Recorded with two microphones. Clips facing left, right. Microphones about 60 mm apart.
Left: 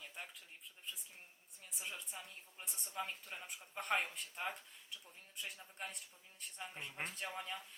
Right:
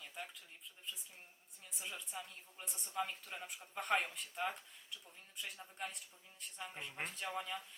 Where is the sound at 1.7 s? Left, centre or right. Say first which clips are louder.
Right 1 dB; centre.